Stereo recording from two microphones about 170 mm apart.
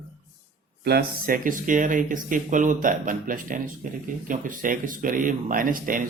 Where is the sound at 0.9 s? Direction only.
60° right (ahead or behind).